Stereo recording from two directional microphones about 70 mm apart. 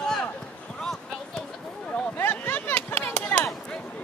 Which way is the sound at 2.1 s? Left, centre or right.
Left.